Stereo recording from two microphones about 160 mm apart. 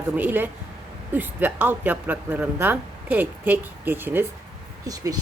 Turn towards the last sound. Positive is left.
turn(degrees=-25)  # may be behind; listen again after turning